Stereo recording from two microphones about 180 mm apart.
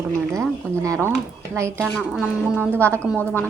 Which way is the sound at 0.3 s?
15° right (ahead or behind).